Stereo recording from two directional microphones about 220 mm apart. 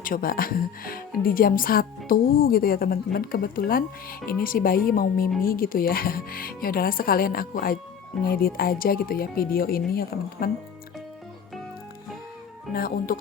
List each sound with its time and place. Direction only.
0.0 s speech: 40° left (ahead or behind)
12.7 s speech: 40° left (ahead or behind)